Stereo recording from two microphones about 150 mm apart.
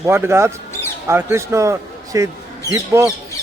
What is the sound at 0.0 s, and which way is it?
A man's voice, 15° right (ahead or behind).